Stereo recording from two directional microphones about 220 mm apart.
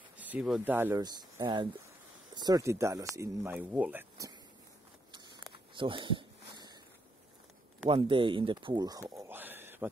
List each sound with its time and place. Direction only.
0.2 s speech: 5° right (ahead or behind)
5.5 s a sound: 20° right (ahead or behind)
7.8 s speech: 25° right (ahead or behind)